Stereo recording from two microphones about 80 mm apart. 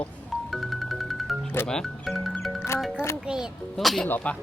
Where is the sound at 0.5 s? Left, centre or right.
Centre.